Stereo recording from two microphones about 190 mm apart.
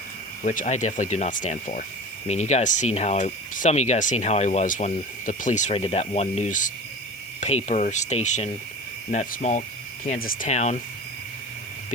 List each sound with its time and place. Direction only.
0.4 s speech: 40° left (ahead or behind)